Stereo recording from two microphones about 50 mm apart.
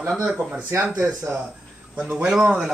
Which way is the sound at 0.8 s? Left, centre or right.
Centre.